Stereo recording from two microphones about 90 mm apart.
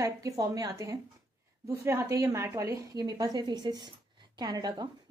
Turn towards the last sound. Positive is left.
turn(degrees=-45)  # may be behind; listen again after turning